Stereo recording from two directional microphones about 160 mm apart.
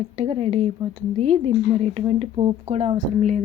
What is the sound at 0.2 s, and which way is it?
A woman's voice, 35° right (ahead or behind).